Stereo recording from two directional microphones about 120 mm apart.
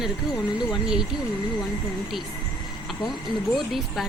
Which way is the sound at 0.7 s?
5° right (ahead or behind).